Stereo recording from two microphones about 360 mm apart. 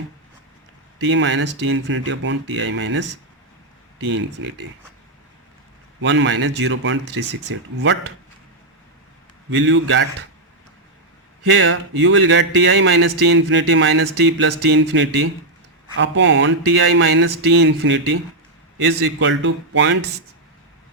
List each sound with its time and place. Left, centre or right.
0.9 s speech: right
6.0 s speech: right
9.5 s speech: right
11.5 s speech: right